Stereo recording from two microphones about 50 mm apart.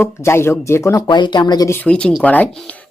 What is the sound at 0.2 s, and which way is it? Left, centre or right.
Speech, left.